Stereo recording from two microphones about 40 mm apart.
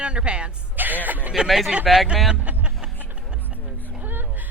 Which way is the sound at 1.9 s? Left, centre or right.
Centre.